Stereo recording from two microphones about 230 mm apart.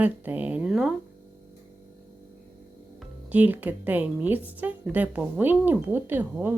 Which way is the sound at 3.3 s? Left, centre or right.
Centre.